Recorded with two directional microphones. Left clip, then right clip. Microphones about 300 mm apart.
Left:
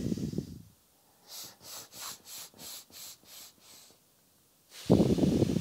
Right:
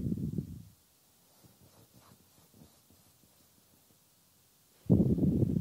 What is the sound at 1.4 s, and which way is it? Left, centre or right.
Breathing, centre.